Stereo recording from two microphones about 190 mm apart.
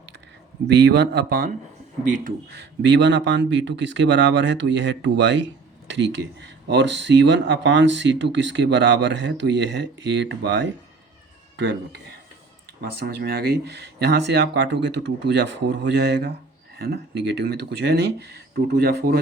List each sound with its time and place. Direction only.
0.7 s speech: 65° right (ahead or behind)
2.0 s speech: 40° right (ahead or behind)
2.5 s speech: 65° right (ahead or behind)
11.5 s speech: 65° right (ahead or behind)
12.8 s speech: 55° right (ahead or behind)